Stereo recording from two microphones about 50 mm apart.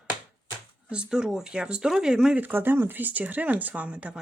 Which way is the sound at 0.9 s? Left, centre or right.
Centre.